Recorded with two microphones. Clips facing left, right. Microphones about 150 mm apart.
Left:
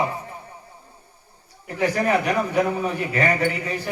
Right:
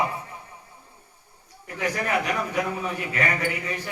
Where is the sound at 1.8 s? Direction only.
35° left (ahead or behind).